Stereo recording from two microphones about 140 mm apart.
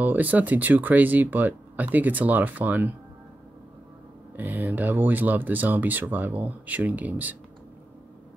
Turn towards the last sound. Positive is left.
turn(degrees=-10)  # may be behind; listen again after turning